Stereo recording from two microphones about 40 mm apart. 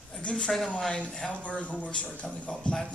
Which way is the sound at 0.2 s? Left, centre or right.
Left.